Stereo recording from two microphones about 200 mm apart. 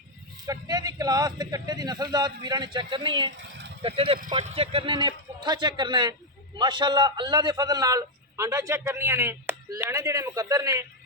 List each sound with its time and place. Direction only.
0.4 s a man's voice: 20° right (ahead or behind)
3.3 s speech: 65° right (ahead or behind)
3.8 s a man's voice: 30° right (ahead or behind)